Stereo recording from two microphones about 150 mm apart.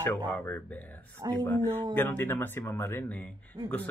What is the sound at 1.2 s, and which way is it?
Speech, 25° right (ahead or behind).